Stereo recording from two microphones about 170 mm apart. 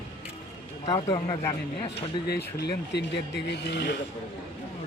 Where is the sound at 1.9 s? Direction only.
75° left (ahead or behind); by 3.9 s 90° left.